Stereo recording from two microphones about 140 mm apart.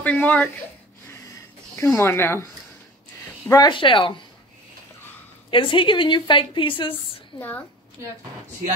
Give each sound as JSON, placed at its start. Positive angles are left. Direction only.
{"t": 0.0, "sound": "a woman's voice", "side_deg": 10}
{"t": 1.1, "sound": "snort", "side_deg": 20}
{"t": 2.0, "sound": "a woman's voice", "side_deg": 15}
{"t": 3.4, "sound": "a woman's voice", "side_deg": 30}
{"t": 5.5, "sound": "a woman's voice", "side_deg": 35}
{"t": 7.3, "sound": "a woman's voice", "side_deg": 15}